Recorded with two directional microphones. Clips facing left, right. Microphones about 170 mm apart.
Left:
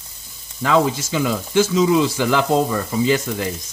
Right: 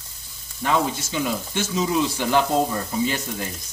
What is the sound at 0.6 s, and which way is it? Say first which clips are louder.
Speech: left 5 dB; 90° left.